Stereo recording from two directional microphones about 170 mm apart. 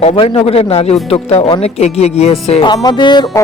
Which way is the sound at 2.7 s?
25° left (ahead or behind).